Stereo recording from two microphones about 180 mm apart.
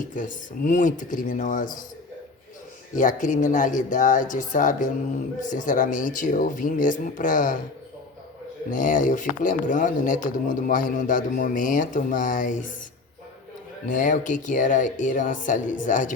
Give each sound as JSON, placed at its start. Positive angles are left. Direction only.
{"t": 0.2, "sound": "speech", "side_deg": 45}
{"t": 2.9, "sound": "speech", "side_deg": 45}
{"t": 8.7, "sound": "speech", "side_deg": 45}
{"t": 13.8, "sound": "speech", "side_deg": 45}